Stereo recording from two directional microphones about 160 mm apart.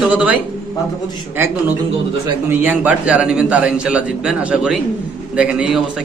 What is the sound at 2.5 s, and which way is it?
A man's voice, 10° right (ahead or behind).